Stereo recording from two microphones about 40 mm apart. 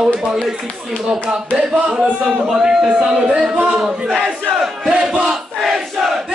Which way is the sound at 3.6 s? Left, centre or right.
Centre.